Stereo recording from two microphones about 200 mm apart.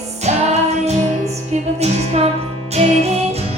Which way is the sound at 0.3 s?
35° right (ahead or behind).